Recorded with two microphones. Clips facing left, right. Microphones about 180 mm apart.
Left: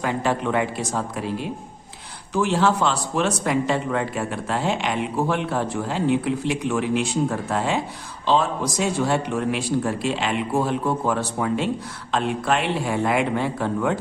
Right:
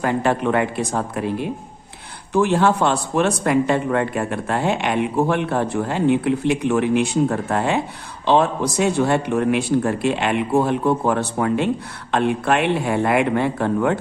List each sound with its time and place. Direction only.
0.0 s speech: 55° right (ahead or behind)